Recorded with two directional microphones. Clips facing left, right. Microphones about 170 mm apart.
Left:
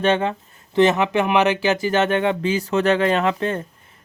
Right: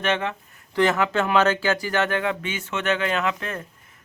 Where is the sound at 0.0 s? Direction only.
30° left (ahead or behind).